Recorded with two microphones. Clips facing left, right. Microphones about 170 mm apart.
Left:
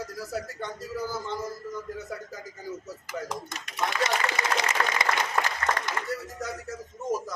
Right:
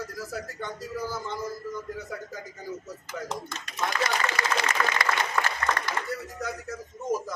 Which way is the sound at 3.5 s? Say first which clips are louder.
Even; 20° left (ahead or behind).